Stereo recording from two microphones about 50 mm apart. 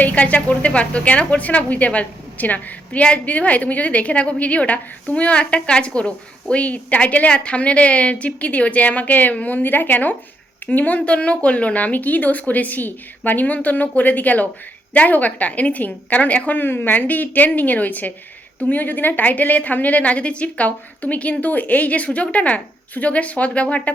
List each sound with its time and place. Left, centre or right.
0.0 s a woman's voice: left
16.6 s a woman's voice: left